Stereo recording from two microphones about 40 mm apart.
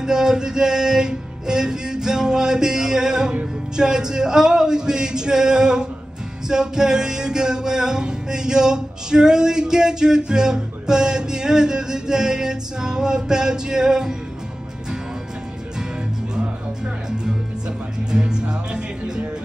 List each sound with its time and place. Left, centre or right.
0.0 s music: centre
18.1 s speech: right